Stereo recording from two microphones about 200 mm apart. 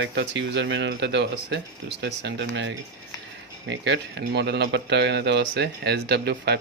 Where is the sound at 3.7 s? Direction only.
60° right (ahead or behind).